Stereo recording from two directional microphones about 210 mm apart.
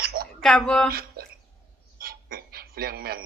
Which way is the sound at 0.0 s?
45° right (ahead or behind).